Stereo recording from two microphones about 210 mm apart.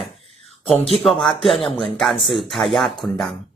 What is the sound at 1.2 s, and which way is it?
Speech, centre (ahead or behind).